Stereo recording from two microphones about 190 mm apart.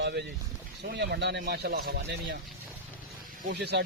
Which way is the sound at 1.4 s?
55° right (ahead or behind).